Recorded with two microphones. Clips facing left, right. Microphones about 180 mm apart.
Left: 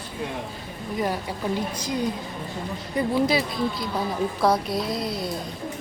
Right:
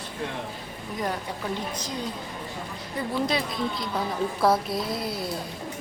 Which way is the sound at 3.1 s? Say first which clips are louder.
Left 3 dB; 5° left (ahead or behind).